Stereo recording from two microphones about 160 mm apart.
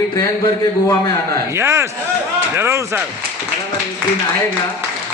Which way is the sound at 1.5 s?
15° right (ahead or behind).